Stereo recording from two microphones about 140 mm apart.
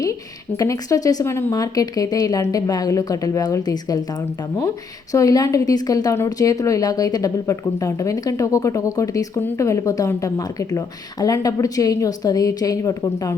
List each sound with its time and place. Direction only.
0.0 s a woman's voice: 25° left (ahead or behind)
5.1 s a woman's voice: 25° left (ahead or behind)